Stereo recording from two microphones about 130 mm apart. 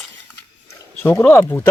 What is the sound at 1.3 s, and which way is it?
Speech, 20° left (ahead or behind).